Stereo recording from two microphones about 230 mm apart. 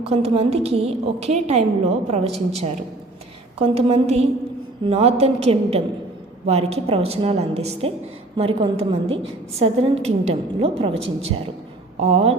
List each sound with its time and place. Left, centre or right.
0.0 s a woman's voice: right